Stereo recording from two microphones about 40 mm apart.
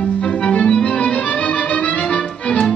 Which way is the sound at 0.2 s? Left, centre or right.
Left.